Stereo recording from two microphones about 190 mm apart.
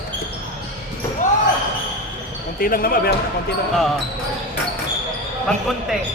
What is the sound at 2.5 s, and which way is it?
Speech, 50° left (ahead or behind).